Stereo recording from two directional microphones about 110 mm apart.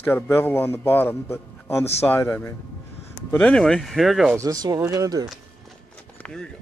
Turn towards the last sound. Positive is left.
turn(degrees=5)  # may be behind; listen again after turning